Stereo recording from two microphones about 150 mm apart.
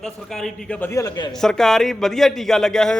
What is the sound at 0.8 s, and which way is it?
Speech, 20° left (ahead or behind).